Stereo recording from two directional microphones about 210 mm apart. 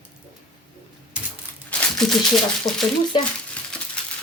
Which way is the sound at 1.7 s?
5° left (ahead or behind).